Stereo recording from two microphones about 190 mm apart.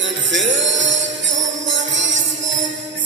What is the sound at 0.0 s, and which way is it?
Music, 75° right (ahead or behind).